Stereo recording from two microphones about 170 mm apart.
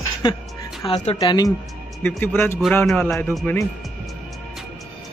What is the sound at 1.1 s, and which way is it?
Speech, 20° left (ahead or behind).